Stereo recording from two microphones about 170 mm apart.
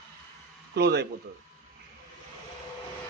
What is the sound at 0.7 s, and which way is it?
Speech, 75° right (ahead or behind).